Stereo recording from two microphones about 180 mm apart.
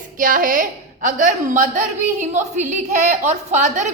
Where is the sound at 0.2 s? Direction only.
50° right (ahead or behind).